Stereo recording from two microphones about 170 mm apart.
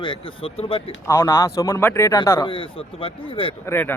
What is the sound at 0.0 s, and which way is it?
Speech, 30° left (ahead or behind).